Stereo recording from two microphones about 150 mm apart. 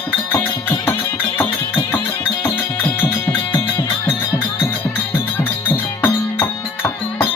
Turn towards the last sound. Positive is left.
turn(degrees=15)  # may be behind; listen again after turning